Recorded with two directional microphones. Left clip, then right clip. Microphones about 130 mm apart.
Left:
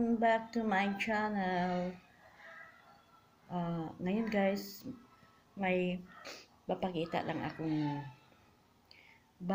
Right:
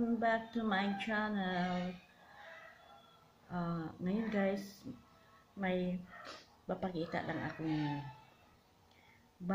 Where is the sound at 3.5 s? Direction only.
25° left (ahead or behind).